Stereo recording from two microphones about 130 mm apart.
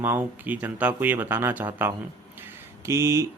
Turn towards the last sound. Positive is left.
turn(degrees=-25)  # may be behind; listen again after turning